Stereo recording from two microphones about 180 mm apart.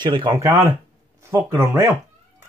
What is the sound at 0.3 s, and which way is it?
Speech, 15° right (ahead or behind).